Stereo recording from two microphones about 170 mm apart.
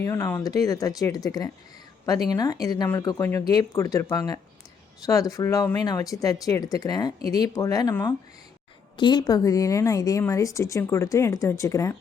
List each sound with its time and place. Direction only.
0.0 s speech: 15° left (ahead or behind)